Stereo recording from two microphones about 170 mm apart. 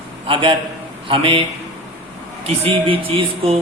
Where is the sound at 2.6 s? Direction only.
30° right (ahead or behind).